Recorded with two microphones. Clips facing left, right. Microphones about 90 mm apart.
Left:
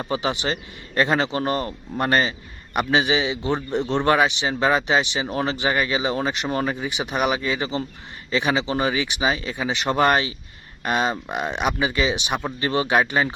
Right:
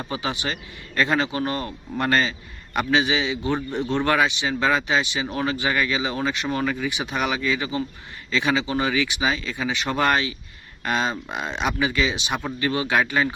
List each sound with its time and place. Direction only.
0.0 s a man's voice: 20° left (ahead or behind)